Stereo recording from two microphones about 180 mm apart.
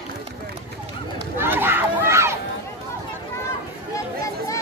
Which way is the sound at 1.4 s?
10° right (ahead or behind).